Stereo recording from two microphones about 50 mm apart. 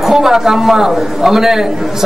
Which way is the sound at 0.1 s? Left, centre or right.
Centre.